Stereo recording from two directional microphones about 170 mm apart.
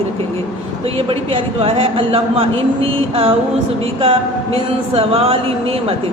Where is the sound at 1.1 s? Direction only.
35° right (ahead or behind).